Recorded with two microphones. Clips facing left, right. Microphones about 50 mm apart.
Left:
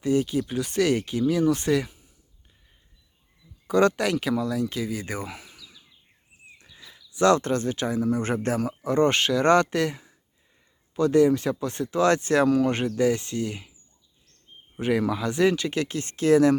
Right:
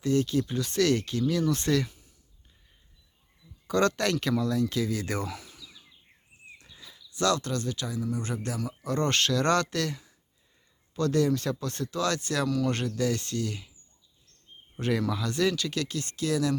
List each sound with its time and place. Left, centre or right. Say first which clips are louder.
0.0 s speech: left 2 dB; centre
3.7 s speech: left 4 dB; centre
7.2 s speech: left 7 dB; left
8.8 s speech: left 5 dB; centre
14.8 s speech: left 4 dB; centre; by 16.6 s left